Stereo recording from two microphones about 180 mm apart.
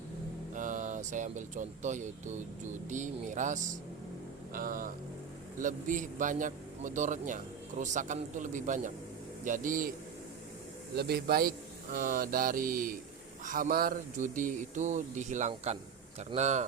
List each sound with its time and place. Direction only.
0.5 s a man's voice: 45° right (ahead or behind)
10.9 s a man's voice: 60° right (ahead or behind); by 16.6 s 40° right (ahead or behind)